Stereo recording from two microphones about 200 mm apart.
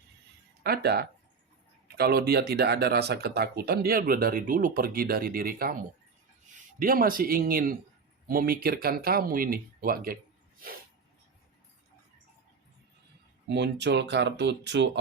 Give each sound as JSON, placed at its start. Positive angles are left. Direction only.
{"t": 0.6, "sound": "speech", "side_deg": -50}
{"t": 6.7, "sound": "speech", "side_deg": -45}
{"t": 13.5, "sound": "speech", "side_deg": -60}